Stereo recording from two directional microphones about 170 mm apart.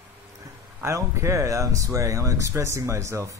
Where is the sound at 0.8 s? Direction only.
15° right (ahead or behind).